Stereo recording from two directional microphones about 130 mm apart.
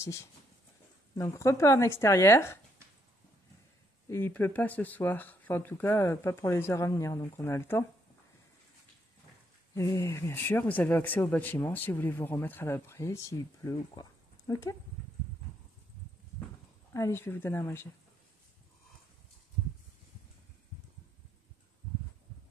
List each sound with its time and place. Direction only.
0.0 s speech: 25° left (ahead or behind)
4.1 s speech: 15° left (ahead or behind)
9.8 s speech: 25° left (ahead or behind)
16.9 s speech: 20° left (ahead or behind)